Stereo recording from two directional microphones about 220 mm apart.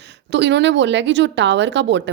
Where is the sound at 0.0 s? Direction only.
55° right (ahead or behind).